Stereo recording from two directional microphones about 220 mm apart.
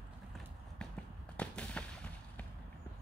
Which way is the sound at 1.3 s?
5° left (ahead or behind).